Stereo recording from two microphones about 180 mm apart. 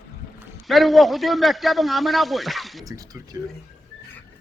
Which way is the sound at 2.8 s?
20° right (ahead or behind).